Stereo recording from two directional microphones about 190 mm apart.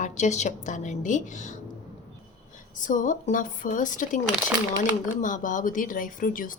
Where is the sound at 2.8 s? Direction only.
45° left (ahead or behind).